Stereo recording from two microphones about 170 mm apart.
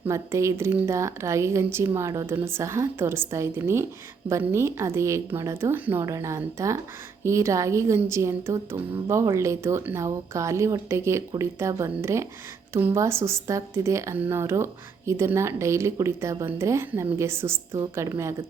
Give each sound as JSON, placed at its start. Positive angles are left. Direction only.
{"t": 0.0, "sound": "speech", "side_deg": -15}